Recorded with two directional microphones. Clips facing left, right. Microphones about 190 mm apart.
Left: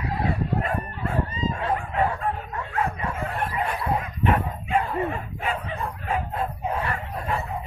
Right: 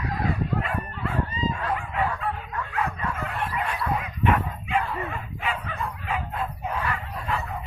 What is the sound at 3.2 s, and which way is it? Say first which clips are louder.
Dog: left 4 dB; 35° left (ahead or behind).